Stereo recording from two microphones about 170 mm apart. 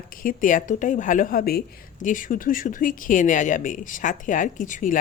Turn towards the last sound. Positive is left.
turn(degrees=50)  # may be behind; listen again after turning